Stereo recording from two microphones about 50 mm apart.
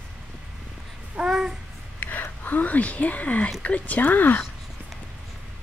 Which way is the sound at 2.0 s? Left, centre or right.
Left.